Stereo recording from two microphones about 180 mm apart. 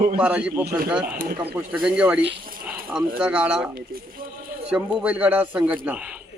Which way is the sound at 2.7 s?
10° right (ahead or behind).